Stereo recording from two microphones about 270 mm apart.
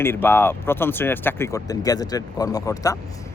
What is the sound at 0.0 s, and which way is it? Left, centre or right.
Speech, centre.